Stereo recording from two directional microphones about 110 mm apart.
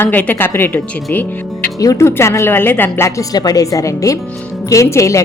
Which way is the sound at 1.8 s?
30° left (ahead or behind).